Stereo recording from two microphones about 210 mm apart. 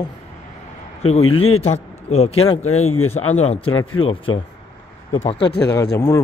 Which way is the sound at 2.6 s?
90° left.